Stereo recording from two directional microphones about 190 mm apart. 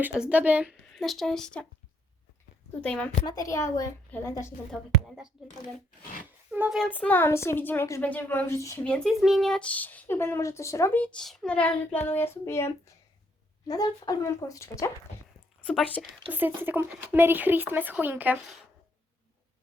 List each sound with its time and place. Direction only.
0.0 s speech: 5° right (ahead or behind)
2.8 s speech: 5° left (ahead or behind)
3.2 s speech: 20° left (ahead or behind)
4.7 s speech: centre (ahead or behind)
6.5 s speech: 5° right (ahead or behind); by 8.8 s 15° left (ahead or behind)
8.8 s speech: centre (ahead or behind)
15.6 s speech: centre (ahead or behind)
16.6 s speech: 10° right (ahead or behind)